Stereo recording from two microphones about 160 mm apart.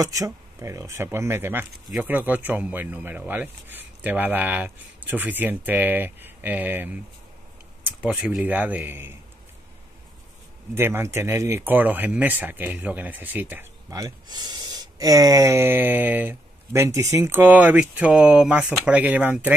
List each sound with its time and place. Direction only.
0.0 s speech: 20° right (ahead or behind)
10.7 s speech: 15° right (ahead or behind)